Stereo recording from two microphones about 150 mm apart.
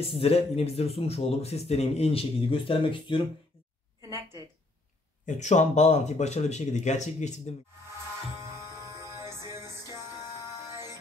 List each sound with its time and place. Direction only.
0.0 s speech: 40° left (ahead or behind)
5.2 s speech: 55° left (ahead or behind)
8.4 s music: 20° right (ahead or behind)